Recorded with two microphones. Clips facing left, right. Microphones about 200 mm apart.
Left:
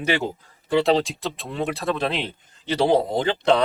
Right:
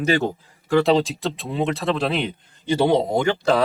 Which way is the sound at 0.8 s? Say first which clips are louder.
Right 2 dB; centre (ahead or behind).